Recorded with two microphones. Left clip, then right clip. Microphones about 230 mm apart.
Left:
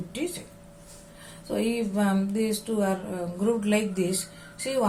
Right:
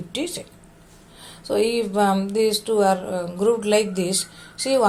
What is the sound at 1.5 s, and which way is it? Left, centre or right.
A woman's voice, right.